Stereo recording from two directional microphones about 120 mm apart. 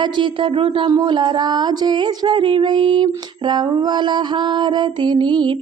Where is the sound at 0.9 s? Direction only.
35° right (ahead or behind).